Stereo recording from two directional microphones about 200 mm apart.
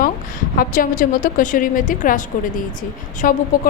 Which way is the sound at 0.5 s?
45° left (ahead or behind).